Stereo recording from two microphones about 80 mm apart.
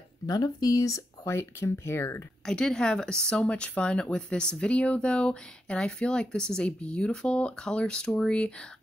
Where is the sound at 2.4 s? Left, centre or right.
Centre.